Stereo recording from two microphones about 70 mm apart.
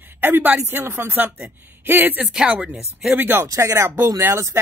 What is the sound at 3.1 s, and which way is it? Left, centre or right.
Speech, right.